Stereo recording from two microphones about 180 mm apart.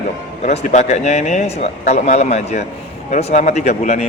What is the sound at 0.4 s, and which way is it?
A man's voice, 40° left (ahead or behind).